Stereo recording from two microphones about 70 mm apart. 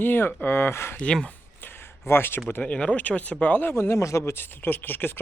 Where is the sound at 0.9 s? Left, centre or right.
Centre.